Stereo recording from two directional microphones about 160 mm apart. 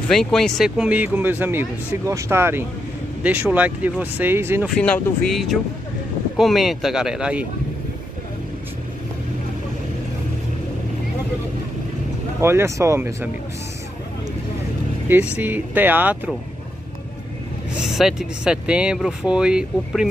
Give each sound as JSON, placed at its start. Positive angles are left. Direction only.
{"t": 0.1, "sound": "speech", "side_deg": 5}
{"t": 4.6, "sound": "speech", "side_deg": 5}
{"t": 12.4, "sound": "speech", "side_deg": -15}
{"t": 15.0, "sound": "speech", "side_deg": -10}
{"t": 17.7, "sound": "speech", "side_deg": 0}